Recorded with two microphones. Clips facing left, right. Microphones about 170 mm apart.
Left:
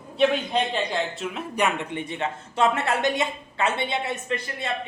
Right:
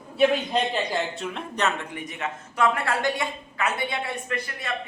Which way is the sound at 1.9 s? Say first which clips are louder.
Left 4 dB; 30° left (ahead or behind).